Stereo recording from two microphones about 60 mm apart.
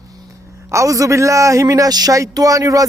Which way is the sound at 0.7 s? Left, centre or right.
Right.